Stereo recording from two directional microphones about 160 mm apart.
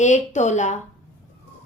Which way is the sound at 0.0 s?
45° left (ahead or behind).